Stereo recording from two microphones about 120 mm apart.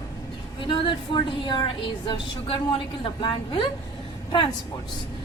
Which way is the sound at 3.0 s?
45° left (ahead or behind).